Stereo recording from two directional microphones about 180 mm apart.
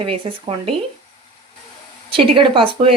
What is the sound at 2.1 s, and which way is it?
Speech, 30° right (ahead or behind).